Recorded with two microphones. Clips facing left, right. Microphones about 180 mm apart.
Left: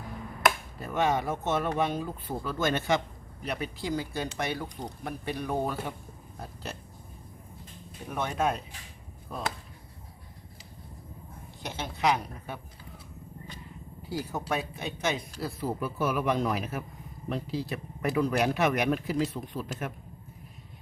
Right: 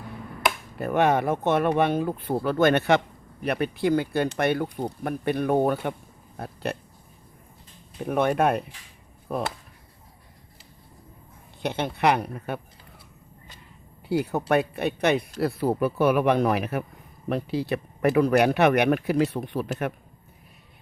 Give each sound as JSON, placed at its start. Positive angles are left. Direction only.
{"t": 0.8, "sound": "speech", "side_deg": -60}
{"t": 8.0, "sound": "speech", "side_deg": -60}
{"t": 11.6, "sound": "speech", "side_deg": -60}
{"t": 14.1, "sound": "speech", "side_deg": -65}